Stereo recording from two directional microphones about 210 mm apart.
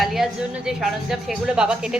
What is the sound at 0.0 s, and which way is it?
A woman's voice, centre (ahead or behind).